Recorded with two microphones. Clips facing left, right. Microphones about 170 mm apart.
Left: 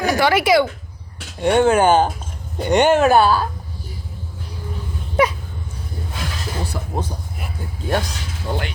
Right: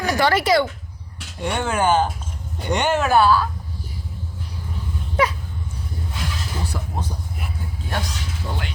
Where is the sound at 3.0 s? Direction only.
20° left (ahead or behind).